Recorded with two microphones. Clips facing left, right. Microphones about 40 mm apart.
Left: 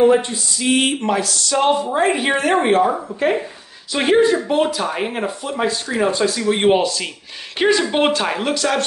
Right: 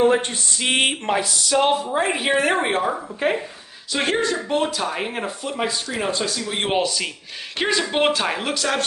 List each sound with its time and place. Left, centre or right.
0.2 s speech: right
1.1 s speech: centre
1.5 s speech: centre